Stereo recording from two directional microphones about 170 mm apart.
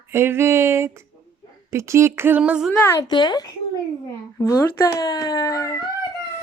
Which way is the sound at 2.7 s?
15° left (ahead or behind).